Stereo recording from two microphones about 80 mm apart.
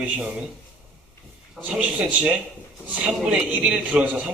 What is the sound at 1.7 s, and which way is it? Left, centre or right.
Speech, centre.